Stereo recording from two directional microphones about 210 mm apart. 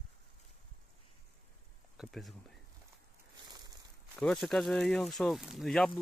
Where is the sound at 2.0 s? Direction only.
Centre (ahead or behind).